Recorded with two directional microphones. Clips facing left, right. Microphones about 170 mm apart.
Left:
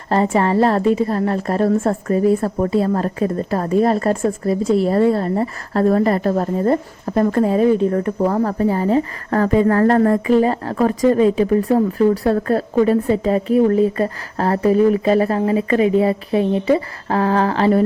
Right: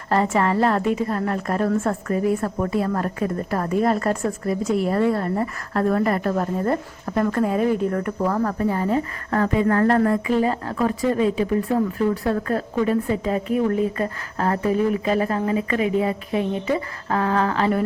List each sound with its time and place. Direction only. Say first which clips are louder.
0.1 s a woman's voice: left 4 dB; 30° left (ahead or behind)